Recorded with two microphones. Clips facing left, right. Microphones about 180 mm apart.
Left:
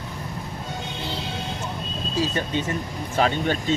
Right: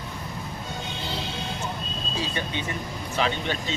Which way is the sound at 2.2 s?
45° left (ahead or behind).